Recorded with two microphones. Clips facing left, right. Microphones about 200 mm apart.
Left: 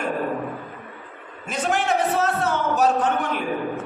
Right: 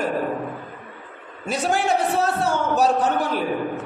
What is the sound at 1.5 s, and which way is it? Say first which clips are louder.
A man's voice: right 1 dB; 35° right (ahead or behind).